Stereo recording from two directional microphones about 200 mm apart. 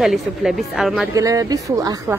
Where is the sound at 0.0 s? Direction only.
Centre (ahead or behind).